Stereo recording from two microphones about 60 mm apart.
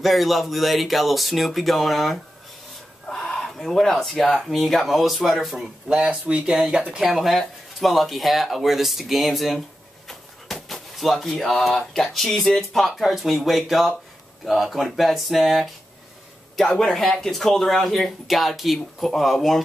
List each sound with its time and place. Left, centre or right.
0.0 s speech: centre
3.1 s speech: centre
5.9 s speech: centre